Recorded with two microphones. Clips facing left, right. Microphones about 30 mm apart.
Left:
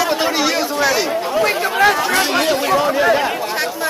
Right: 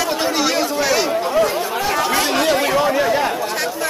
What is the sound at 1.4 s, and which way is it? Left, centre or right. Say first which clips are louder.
Speech: left 3 dB; left.